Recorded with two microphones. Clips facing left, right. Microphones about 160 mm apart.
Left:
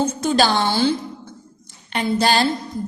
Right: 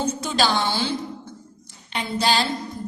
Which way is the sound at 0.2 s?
45° left (ahead or behind).